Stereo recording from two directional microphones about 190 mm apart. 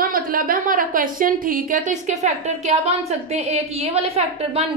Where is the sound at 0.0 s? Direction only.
50° right (ahead or behind).